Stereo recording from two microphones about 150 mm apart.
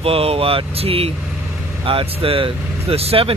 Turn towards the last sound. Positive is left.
turn(degrees=-40)  # may be behind; listen again after turning